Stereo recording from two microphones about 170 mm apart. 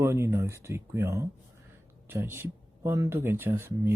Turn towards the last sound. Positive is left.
turn(degrees=-15)  # may be behind; listen again after turning